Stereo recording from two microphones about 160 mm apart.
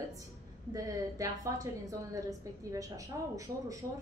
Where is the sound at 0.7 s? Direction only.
20° right (ahead or behind).